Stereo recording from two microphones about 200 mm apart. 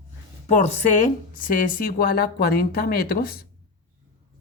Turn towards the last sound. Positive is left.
turn(degrees=50)  # may be behind; listen again after turning